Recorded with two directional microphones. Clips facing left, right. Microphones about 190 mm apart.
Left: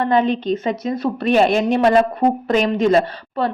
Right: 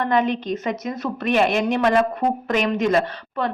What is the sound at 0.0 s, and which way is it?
A woman's voice, 30° left (ahead or behind).